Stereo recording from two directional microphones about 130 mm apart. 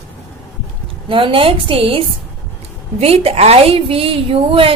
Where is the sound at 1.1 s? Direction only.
40° right (ahead or behind).